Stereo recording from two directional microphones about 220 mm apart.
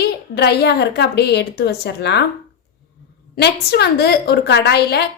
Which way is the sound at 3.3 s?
45° left (ahead or behind).